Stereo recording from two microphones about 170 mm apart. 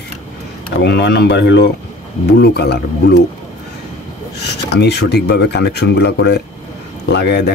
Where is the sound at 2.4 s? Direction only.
75° left (ahead or behind).